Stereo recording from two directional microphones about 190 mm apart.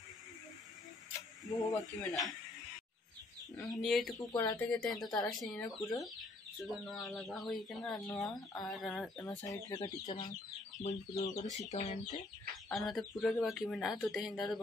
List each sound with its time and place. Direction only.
1.5 s speech: 20° left (ahead or behind)
3.5 s speech: centre (ahead or behind)
4.2 s speech: 20° left (ahead or behind)
4.6 s speech: 5° left (ahead or behind)
5.0 s speech: 20° left (ahead or behind)
5.3 s speech: centre (ahead or behind)
9.2 s speech: 20° left (ahead or behind)
10.8 s speech: 35° left (ahead or behind)
12.6 s speech: centre (ahead or behind)